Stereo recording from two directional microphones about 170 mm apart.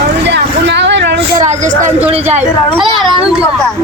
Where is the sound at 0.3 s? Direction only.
90° right.